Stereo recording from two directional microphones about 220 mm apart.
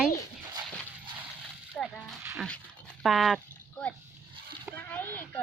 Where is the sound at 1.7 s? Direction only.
5° left (ahead or behind).